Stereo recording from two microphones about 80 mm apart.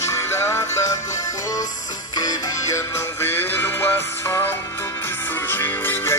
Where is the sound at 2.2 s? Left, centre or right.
Left.